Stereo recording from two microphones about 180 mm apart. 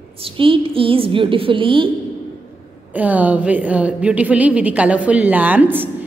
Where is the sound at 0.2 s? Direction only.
30° right (ahead or behind).